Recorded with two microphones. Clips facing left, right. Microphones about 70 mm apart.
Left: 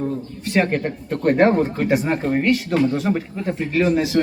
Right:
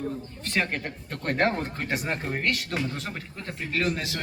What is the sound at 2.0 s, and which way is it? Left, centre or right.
A man's voice, left.